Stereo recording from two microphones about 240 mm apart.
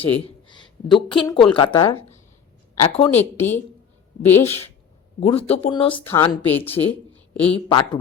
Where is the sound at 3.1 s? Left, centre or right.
Centre.